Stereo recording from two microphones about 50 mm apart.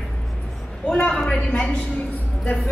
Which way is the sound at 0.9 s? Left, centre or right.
Centre.